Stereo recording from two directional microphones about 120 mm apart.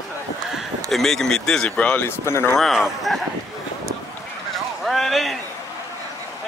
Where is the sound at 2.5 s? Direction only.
Centre (ahead or behind).